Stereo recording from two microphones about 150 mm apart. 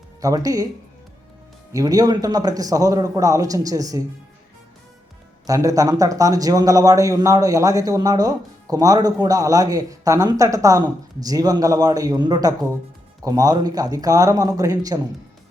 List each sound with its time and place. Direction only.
0.2 s speech: 25° right (ahead or behind)
1.7 s speech: 25° right (ahead or behind)
5.5 s speech: 25° right (ahead or behind)